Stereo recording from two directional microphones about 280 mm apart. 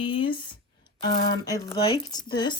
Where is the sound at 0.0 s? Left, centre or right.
Centre.